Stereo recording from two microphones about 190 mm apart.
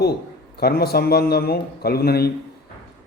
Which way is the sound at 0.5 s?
55° left (ahead or behind).